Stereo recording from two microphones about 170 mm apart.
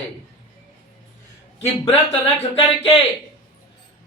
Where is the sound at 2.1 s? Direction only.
35° left (ahead or behind).